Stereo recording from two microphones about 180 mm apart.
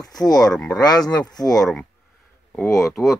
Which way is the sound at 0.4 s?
5° left (ahead or behind).